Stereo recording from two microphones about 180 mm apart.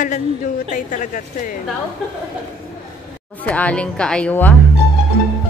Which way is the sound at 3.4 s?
5° left (ahead or behind).